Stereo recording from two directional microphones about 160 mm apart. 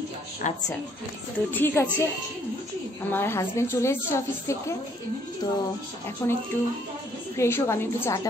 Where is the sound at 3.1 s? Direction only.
15° left (ahead or behind).